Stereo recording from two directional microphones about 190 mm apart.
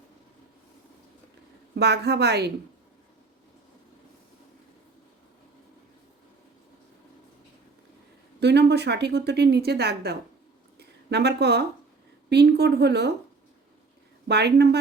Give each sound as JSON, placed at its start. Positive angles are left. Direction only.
{"t": 1.7, "sound": "a woman's voice", "side_deg": -60}
{"t": 8.4, "sound": "a woman's voice", "side_deg": -60}
{"t": 10.8, "sound": "a sound", "side_deg": -60}
{"t": 12.3, "sound": "a woman's voice", "side_deg": -60}
{"t": 14.3, "sound": "a woman's voice", "side_deg": -60}